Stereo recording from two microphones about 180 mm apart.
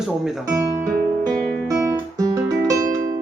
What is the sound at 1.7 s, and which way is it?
Guitar, 20° right (ahead or behind).